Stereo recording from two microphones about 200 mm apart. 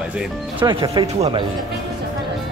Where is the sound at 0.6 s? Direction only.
25° right (ahead or behind).